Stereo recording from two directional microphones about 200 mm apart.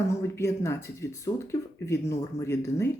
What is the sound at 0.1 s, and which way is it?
Speech, 15° left (ahead or behind).